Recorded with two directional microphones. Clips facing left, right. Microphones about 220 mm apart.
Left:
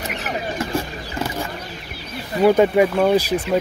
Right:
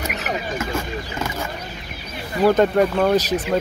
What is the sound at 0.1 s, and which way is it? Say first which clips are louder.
Vehicle: even; 35° left (ahead or behind).